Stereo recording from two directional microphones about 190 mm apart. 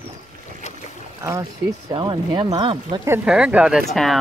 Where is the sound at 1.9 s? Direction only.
25° right (ahead or behind).